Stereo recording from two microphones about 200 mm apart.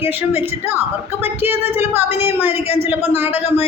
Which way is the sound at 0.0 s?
10° right (ahead or behind).